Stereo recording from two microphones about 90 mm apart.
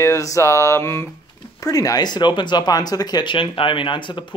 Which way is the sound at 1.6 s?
40° left (ahead or behind).